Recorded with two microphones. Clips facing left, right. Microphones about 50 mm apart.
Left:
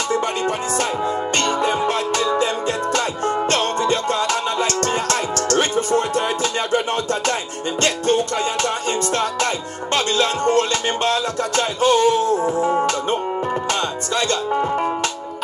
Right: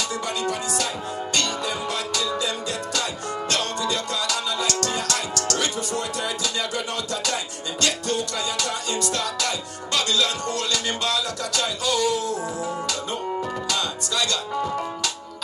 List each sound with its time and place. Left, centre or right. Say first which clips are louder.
0.1 s music: left 6 dB; left
7.8 s music: left 6 dB; left